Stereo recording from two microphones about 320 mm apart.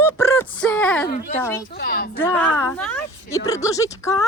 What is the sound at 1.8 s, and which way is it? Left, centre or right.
Speech, left.